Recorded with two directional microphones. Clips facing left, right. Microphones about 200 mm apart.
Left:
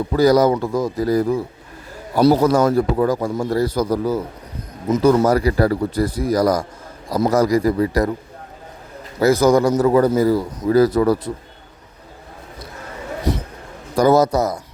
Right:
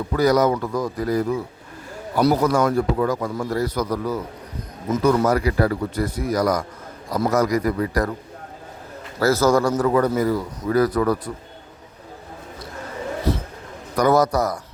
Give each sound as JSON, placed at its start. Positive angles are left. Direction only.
{"t": 0.1, "sound": "a man's voice", "side_deg": 30}
{"t": 9.1, "sound": "a man's voice", "side_deg": 15}
{"t": 13.9, "sound": "a man's voice", "side_deg": 25}